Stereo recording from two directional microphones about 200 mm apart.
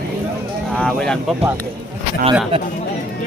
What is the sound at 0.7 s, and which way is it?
Speech, 5° left (ahead or behind).